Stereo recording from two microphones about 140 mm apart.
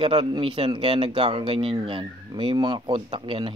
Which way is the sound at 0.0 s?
40° right (ahead or behind).